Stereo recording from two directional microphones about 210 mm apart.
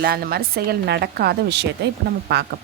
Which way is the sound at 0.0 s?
45° right (ahead or behind).